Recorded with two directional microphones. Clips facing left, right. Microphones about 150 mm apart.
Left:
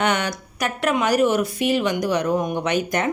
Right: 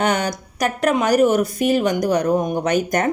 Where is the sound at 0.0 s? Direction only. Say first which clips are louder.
Right 2 dB; 40° right (ahead or behind).